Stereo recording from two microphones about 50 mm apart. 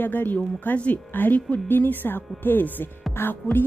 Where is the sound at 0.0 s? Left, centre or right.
Left.